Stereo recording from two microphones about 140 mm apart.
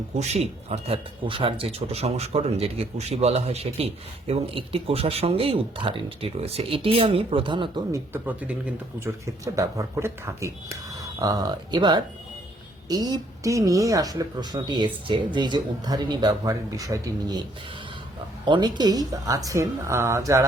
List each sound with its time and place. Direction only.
0.2 s speech: 50° right (ahead or behind)
7.9 s speech: 15° right (ahead or behind)
9.2 s a woman's voice: 20° right (ahead or behind)
18.4 s a woman's voice: 35° right (ahead or behind)